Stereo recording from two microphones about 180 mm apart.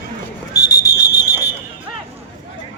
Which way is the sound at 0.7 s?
20° left (ahead or behind).